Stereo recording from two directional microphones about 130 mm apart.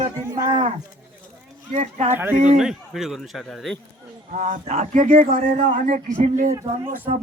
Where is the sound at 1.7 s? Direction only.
60° right (ahead or behind).